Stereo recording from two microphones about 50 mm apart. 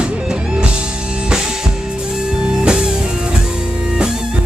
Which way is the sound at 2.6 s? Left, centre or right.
Centre.